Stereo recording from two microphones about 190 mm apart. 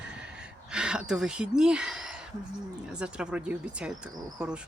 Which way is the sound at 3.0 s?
5° right (ahead or behind).